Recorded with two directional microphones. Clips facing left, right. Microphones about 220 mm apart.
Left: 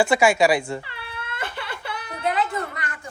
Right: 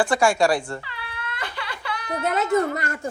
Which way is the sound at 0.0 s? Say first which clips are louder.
Left 1 dB; 5° left (ahead or behind).